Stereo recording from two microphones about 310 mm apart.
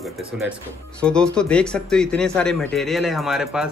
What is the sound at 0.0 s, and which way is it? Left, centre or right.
A man's voice, centre.